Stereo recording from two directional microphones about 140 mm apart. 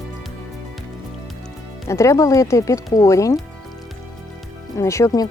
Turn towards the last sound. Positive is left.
turn(degrees=25)  # may be behind; listen again after turning